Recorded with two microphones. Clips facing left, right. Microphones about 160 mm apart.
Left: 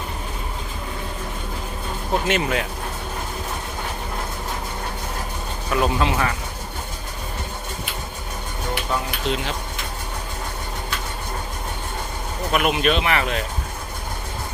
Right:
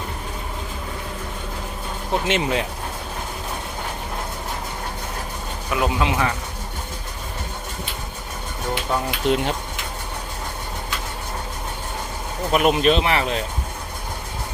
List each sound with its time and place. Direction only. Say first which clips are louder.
2.2 s speech: right 1 dB; 25° right (ahead or behind)
5.7 s speech: left 1 dB; 15° right (ahead or behind)
8.7 s a sound: right 2 dB; 20° right (ahead or behind)
9.2 s speech: right 4 dB; 50° right (ahead or behind)
12.5 s speech: right 3 dB; 35° right (ahead or behind)